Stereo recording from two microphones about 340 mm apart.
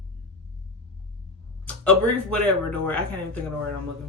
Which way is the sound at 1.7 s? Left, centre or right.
Centre.